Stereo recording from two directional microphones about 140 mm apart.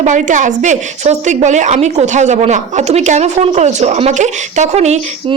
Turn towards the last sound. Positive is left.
turn(degrees=-55)  # may be behind; listen again after turning